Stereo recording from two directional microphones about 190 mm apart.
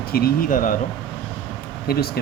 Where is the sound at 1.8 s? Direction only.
55° left (ahead or behind).